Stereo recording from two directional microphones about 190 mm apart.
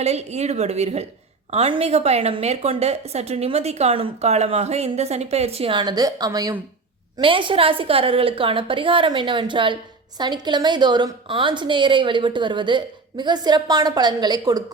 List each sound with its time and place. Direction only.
0.0 s a woman's voice: 35° right (ahead or behind)